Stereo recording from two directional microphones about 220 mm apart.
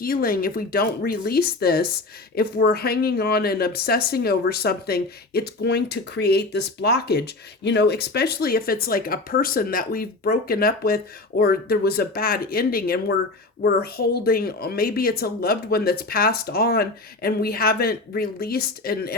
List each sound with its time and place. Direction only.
0.0 s speech: 40° left (ahead or behind)